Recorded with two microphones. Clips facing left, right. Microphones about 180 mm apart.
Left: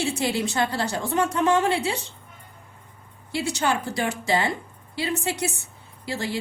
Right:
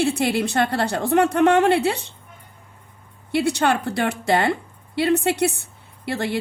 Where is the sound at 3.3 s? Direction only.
60° right (ahead or behind).